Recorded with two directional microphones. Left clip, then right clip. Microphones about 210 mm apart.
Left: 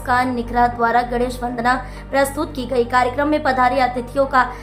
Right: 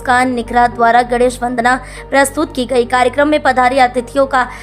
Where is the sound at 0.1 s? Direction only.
40° right (ahead or behind).